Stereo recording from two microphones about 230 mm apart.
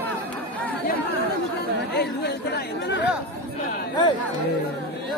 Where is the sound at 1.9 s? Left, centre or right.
Left.